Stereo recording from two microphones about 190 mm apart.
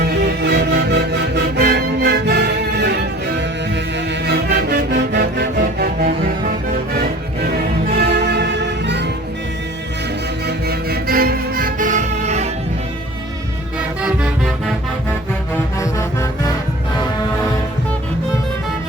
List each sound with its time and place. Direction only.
0.2 s music: 60° right (ahead or behind)
7.9 s music: 60° right (ahead or behind)
10.4 s music: 55° right (ahead or behind); by 12.5 s 35° right (ahead or behind)